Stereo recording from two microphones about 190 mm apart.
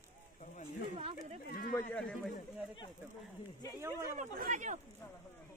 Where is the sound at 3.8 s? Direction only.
15° right (ahead or behind).